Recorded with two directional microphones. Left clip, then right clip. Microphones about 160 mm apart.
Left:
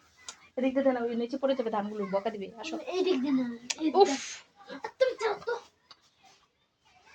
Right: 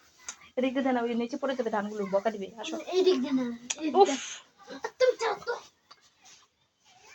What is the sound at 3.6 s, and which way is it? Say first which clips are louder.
Speech: right 1 dB; 10° left (ahead or behind).